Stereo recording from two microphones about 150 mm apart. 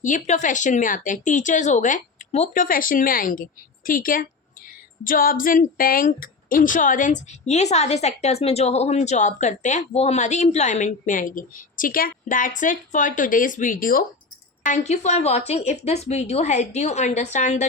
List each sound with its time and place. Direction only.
0.0 s a woman's voice: 55° left (ahead or behind); by 14.0 s 70° left (ahead or behind)
14.6 s speech: 55° left (ahead or behind)